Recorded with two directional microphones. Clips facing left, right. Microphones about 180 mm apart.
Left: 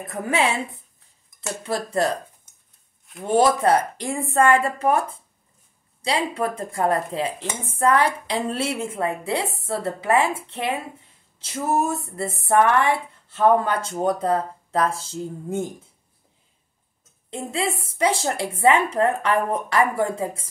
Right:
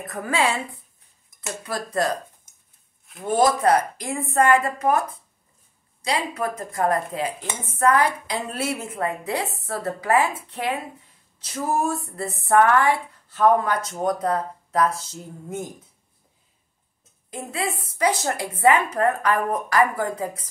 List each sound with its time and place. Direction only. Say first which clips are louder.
0.0 s speech: left 2 dB; 25° left (ahead or behind)
1.6 s speech: left 2 dB; 25° left (ahead or behind)
3.3 s speech: left 1 dB; 30° left (ahead or behind)
6.0 s speech: left 2 dB; 30° left (ahead or behind)
17.3 s speech: left 2 dB; 25° left (ahead or behind)